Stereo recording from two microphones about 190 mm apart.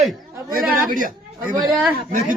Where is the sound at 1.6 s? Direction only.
Centre (ahead or behind).